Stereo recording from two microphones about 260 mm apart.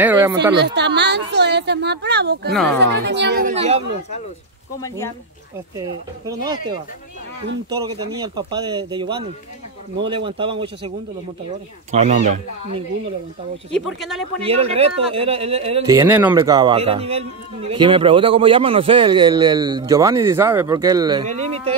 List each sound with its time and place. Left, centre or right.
0.0 s speech: centre
0.6 s a woman's voice: right
2.5 s speech: centre
2.8 s a woman's voice: right
3.5 s a man's voice: right
4.7 s speech: centre
5.8 s speech: centre
7.7 s a man's voice: centre
11.9 s a man's voice: right
13.7 s speech: centre
14.4 s a man's voice: right
15.9 s a man's voice: centre